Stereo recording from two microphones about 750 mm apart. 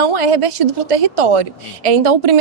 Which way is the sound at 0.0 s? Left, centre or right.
Right.